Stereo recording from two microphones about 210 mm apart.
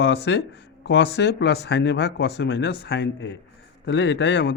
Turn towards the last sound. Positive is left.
turn(degrees=60)  # may be behind; listen again after turning